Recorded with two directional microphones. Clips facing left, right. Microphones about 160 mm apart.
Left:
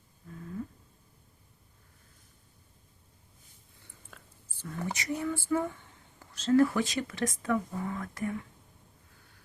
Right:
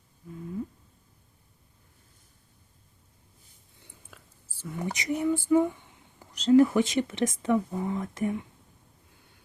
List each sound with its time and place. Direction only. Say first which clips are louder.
4.1 s speech: even; 5° right (ahead or behind)